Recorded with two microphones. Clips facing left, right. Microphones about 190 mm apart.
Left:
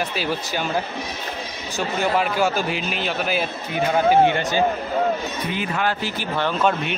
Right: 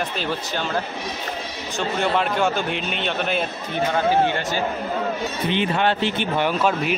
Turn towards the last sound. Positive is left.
turn(degrees=-5)  # may be behind; listen again after turning